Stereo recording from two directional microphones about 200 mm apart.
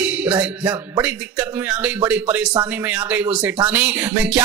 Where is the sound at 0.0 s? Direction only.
10° right (ahead or behind).